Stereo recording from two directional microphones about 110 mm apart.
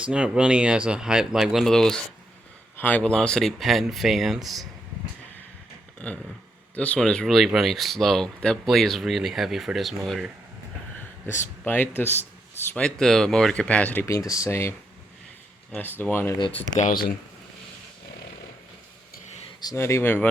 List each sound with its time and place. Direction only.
0.0 s speech: 10° right (ahead or behind)
2.7 s speech: 15° left (ahead or behind); by 4.7 s centre (ahead or behind)
6.0 s speech: 10° left (ahead or behind)
11.3 s speech: 20° left (ahead or behind)
12.8 s speech: 5° left (ahead or behind)
14.1 s speech: 30° left (ahead or behind)
15.7 s speech: 20° left (ahead or behind)
16.4 s speech: 60° left (ahead or behind)
19.7 s speech: 25° left (ahead or behind)